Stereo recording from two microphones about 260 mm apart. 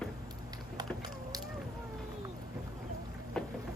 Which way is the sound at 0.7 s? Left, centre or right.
Centre.